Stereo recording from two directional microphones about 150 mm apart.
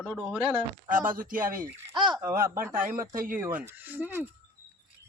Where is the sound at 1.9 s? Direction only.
30° right (ahead or behind).